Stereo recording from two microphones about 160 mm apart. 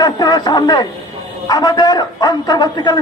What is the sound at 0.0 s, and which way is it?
A man's voice, 25° left (ahead or behind).